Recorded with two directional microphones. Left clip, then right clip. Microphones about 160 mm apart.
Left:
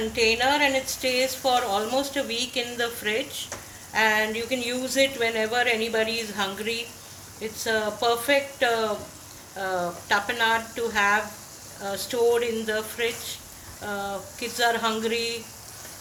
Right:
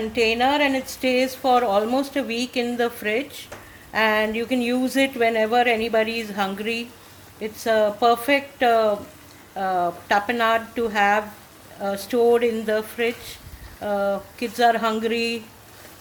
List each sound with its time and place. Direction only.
0.1 s a woman's voice: 70° right (ahead or behind)